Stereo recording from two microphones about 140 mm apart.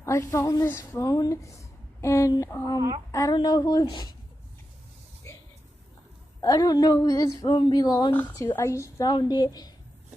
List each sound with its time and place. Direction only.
0.0 s a woman's voice: 20° left (ahead or behind)
6.4 s speech: 25° left (ahead or behind)
8.1 s speech: 15° left (ahead or behind); by 9.7 s 30° left (ahead or behind)